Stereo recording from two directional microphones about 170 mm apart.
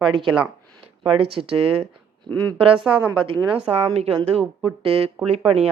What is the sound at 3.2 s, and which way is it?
A woman's voice, 35° right (ahead or behind).